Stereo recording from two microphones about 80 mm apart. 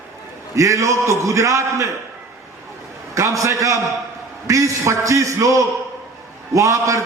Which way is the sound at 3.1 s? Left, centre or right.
Right.